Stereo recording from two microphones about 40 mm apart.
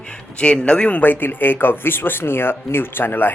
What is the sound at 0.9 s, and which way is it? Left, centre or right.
Speech, left.